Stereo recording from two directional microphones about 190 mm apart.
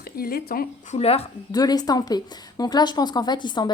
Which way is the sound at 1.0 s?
30° left (ahead or behind).